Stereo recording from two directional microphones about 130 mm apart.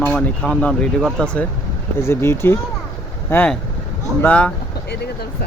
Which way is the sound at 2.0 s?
20° left (ahead or behind).